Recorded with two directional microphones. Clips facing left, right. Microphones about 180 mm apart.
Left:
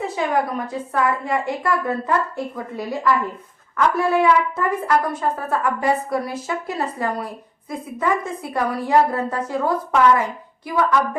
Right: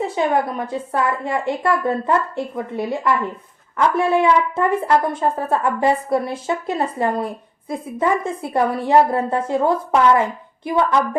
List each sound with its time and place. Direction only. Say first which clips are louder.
0.2 s a woman's voice: right 2 dB; 25° right (ahead or behind)